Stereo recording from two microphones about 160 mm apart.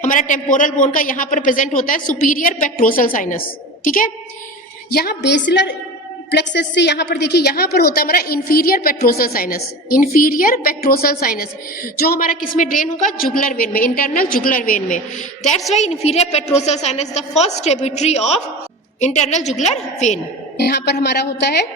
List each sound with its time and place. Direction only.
0.0 s a man's voice: 55° left (ahead or behind)
4.9 s a woman's voice: 80° left; by 15.0 s 55° left (ahead or behind)
15.7 s a woman's voice: 45° left (ahead or behind)
20.6 s a woman's voice: 90° left